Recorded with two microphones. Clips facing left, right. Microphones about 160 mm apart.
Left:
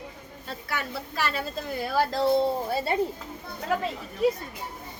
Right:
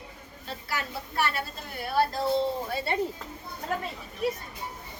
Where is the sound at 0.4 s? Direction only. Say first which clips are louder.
Left 1 dB; 55° left (ahead or behind).